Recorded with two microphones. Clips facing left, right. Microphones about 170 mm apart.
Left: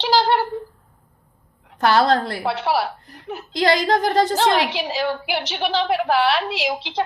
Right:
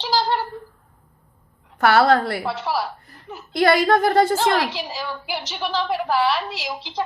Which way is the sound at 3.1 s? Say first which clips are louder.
Left 6 dB; 70° left (ahead or behind).